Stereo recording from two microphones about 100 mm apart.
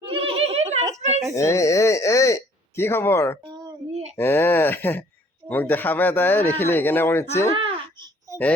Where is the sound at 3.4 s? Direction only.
45° right (ahead or behind).